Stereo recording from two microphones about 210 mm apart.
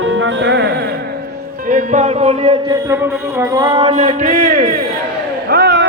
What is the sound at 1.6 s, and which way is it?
Music, 35° right (ahead or behind).